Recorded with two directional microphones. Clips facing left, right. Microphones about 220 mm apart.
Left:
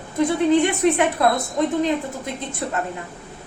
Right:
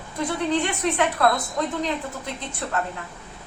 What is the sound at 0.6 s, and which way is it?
A woman's voice, 20° left (ahead or behind).